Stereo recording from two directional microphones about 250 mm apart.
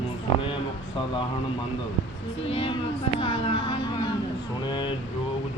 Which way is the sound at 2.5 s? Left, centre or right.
Left.